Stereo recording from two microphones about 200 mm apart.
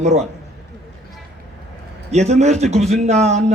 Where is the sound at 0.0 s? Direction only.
35° right (ahead or behind).